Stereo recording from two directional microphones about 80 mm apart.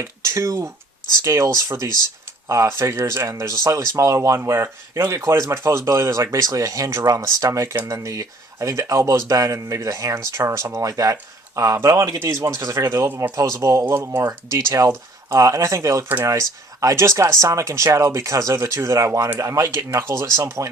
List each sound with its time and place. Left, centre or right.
0.0 s speech: right
2.5 s speech: right
4.4 s speech: right